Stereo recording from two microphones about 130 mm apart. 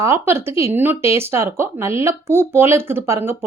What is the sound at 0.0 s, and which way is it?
Speech, 20° right (ahead or behind).